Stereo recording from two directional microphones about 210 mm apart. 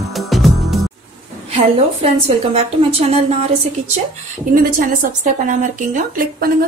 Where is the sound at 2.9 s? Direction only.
30° right (ahead or behind).